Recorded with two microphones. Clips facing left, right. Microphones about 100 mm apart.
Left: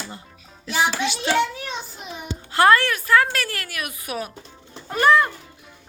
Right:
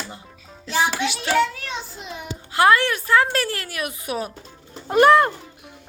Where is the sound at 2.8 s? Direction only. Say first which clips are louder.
Even; 25° right (ahead or behind).